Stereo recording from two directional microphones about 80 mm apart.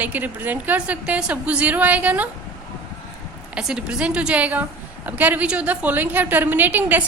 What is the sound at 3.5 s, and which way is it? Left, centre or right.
A woman's voice, centre.